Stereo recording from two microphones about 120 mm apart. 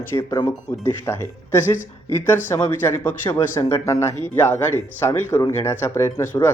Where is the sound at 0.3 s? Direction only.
30° left (ahead or behind).